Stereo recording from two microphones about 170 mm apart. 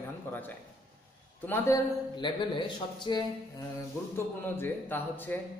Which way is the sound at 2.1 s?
25° left (ahead or behind).